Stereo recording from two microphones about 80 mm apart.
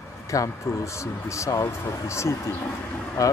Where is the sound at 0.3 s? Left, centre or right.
Left.